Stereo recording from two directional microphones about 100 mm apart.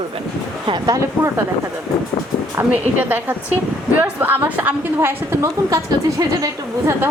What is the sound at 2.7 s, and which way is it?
A woman's voice, 20° right (ahead or behind).